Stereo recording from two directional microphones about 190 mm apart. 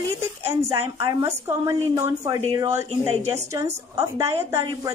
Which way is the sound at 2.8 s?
35° right (ahead or behind).